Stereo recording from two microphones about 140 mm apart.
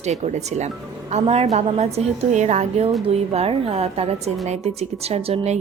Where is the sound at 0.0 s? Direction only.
55° right (ahead or behind).